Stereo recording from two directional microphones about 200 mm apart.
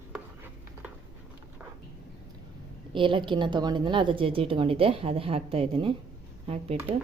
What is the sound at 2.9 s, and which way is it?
A woman's voice, 25° right (ahead or behind).